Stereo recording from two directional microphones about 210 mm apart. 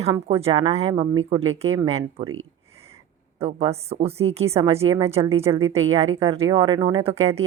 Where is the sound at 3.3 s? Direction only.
30° right (ahead or behind).